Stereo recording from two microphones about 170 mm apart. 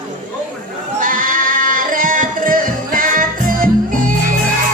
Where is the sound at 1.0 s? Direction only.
55° right (ahead or behind).